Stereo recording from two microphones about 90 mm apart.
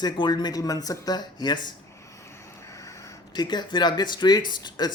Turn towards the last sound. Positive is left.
turn(degrees=55)  # may be behind; listen again after turning